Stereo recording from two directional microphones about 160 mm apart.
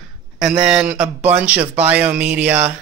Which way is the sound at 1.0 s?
40° right (ahead or behind).